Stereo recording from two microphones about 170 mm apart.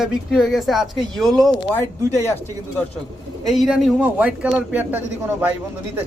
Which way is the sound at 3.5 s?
Centre (ahead or behind).